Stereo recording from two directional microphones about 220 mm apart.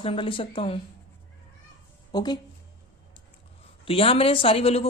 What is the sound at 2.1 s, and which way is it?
Speech, 20° left (ahead or behind).